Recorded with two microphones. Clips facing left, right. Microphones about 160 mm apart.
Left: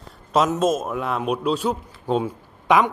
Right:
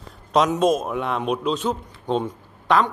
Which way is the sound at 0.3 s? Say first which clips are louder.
Right 1 dB; centre (ahead or behind).